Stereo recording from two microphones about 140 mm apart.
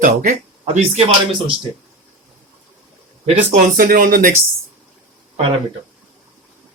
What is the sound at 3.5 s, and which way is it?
Speech, 85° right.